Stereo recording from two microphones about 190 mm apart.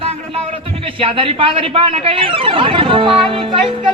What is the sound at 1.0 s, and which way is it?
Speech, 30° right (ahead or behind).